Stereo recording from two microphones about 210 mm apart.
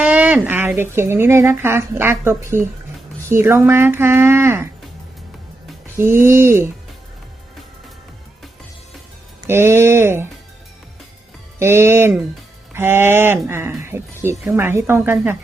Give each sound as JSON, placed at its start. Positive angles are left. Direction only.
{"t": 0.0, "sound": "a sound", "side_deg": -5}
{"t": 0.9, "sound": "speech", "side_deg": -10}
{"t": 6.0, "sound": "speech", "side_deg": -10}
{"t": 9.5, "sound": "speech", "side_deg": -10}
{"t": 11.6, "sound": "speech", "side_deg": -10}